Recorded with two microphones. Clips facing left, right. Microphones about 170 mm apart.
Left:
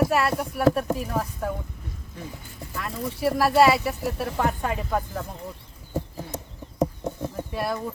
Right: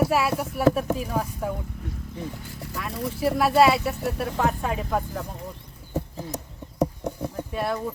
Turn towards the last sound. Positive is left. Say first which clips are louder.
# right 1 dB
turn(degrees=0)  # may be behind; listen again after turning